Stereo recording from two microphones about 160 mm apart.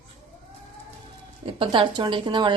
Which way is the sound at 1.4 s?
30° right (ahead or behind).